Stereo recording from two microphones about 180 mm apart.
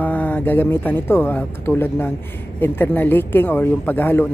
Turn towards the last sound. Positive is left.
turn(degrees=10)  # may be behind; listen again after turning